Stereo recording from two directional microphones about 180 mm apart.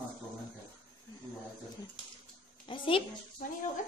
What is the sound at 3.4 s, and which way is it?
Speech, 45° left (ahead or behind).